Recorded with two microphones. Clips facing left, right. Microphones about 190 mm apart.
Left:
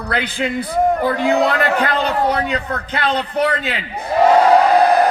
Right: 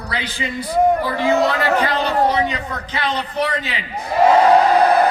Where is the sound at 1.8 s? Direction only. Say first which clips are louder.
Even; 55° left (ahead or behind).